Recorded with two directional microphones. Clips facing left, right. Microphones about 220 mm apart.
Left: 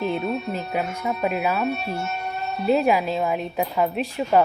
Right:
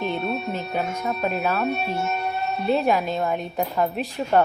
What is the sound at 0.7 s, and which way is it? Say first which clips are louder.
Speech: even; 10° left (ahead or behind).